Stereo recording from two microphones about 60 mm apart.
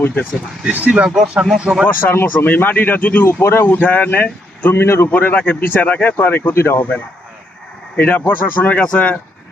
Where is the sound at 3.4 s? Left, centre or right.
Left.